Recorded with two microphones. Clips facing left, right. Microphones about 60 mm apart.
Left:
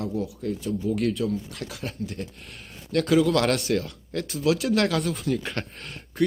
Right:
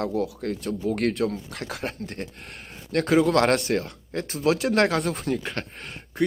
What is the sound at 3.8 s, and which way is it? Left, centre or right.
Speech, right.